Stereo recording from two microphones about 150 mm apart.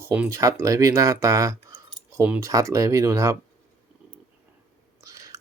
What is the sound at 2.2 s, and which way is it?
Speech, 10° right (ahead or behind).